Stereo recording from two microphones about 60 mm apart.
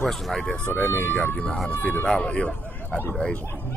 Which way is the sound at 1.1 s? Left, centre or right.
Left.